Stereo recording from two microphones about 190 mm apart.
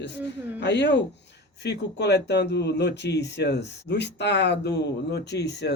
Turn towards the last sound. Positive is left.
turn(degrees=65)  # may be behind; listen again after turning